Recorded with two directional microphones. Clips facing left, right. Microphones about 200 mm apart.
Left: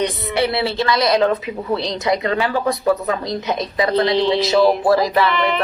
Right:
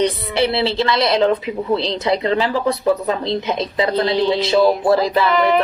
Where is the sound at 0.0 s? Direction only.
30° right (ahead or behind).